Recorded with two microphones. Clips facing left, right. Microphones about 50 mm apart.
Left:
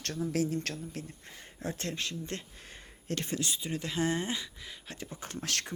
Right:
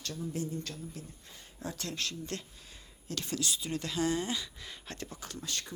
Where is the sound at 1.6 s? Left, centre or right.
Left.